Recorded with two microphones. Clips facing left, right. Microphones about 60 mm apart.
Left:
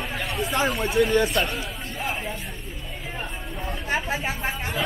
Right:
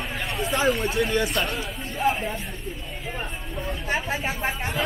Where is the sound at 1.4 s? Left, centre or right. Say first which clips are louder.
Left 1 dB; centre.